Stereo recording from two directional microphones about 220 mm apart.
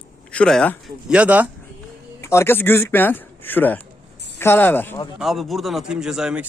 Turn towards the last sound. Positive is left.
turn(degrees=-5)  # may be behind; listen again after turning